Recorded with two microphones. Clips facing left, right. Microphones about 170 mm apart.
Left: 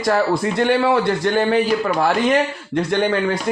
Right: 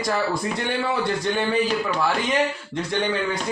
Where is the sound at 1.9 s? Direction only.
60° left (ahead or behind).